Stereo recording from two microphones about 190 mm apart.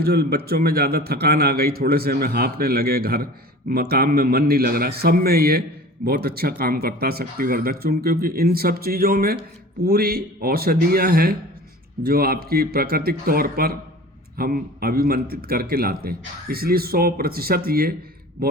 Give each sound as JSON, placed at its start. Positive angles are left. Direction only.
{"t": 0.0, "sound": "a man's voice", "side_deg": -55}